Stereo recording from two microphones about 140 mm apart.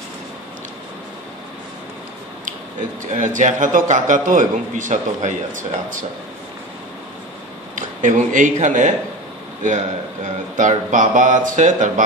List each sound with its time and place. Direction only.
3.1 s a man's voice: 60° right (ahead or behind)
7.7 s a man's voice: 65° right (ahead or behind)